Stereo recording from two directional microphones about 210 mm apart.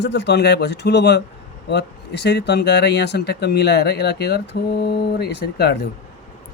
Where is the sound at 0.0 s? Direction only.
55° left (ahead or behind).